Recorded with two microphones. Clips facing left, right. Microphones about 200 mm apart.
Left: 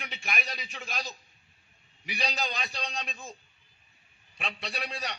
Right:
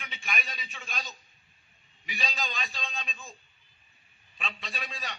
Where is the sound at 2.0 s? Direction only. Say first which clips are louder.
Left 3 dB; 75° left (ahead or behind).